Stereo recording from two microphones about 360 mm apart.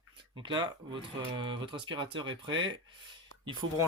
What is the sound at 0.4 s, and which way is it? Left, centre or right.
Speech, centre.